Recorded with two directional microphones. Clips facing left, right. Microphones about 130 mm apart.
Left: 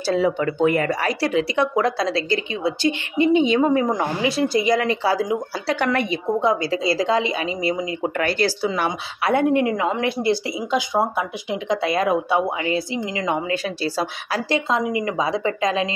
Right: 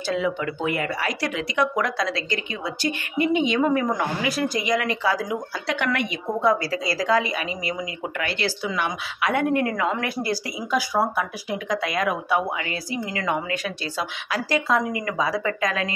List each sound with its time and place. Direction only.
0.0 s a woman's voice: 35° left (ahead or behind)
8.2 s a woman's voice: 40° left (ahead or behind); by 13.4 s 20° left (ahead or behind)
13.5 s speech: 35° left (ahead or behind)
14.7 s a woman's voice: 20° left (ahead or behind)